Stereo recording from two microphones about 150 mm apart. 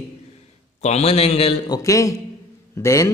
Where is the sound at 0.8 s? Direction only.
45° left (ahead or behind).